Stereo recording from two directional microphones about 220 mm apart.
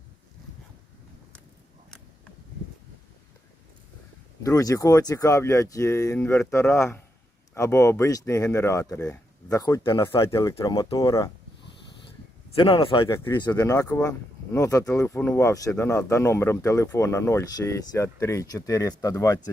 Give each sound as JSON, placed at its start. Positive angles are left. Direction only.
{"t": 4.4, "sound": "speech", "side_deg": 15}
{"t": 12.5, "sound": "speech", "side_deg": 25}
{"t": 13.1, "sound": "speech", "side_deg": 10}